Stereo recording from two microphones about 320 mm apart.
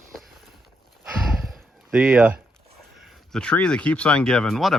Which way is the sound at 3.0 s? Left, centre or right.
Centre.